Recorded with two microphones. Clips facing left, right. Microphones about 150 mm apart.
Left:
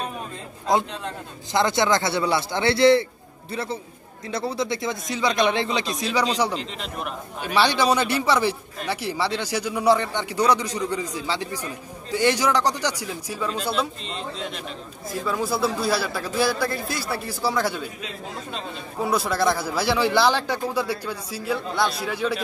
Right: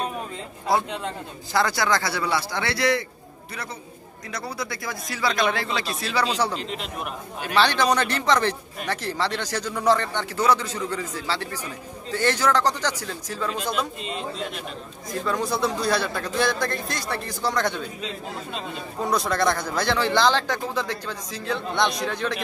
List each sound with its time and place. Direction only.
1.5 s a man's voice: 20° left (ahead or behind)
4.3 s a man's voice: 25° left (ahead or behind)
6.5 s a man's voice: 5° right (ahead or behind)
7.4 s speech: 10° left (ahead or behind)
13.5 s a man's voice: 10° right (ahead or behind); by 22.4 s 10° left (ahead or behind)